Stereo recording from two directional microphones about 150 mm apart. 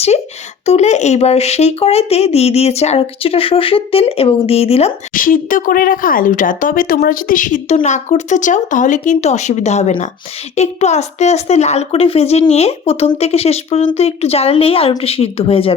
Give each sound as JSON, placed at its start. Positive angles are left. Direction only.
{"t": 0.6, "sound": "speech", "side_deg": 50}
{"t": 5.1, "sound": "speech", "side_deg": 65}